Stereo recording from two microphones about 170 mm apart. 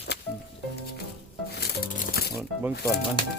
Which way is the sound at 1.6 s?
60° left (ahead or behind).